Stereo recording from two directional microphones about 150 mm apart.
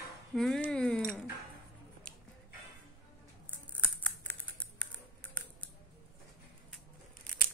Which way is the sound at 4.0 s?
10° left (ahead or behind).